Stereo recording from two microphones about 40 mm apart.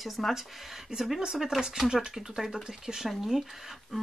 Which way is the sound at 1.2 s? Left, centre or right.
Centre.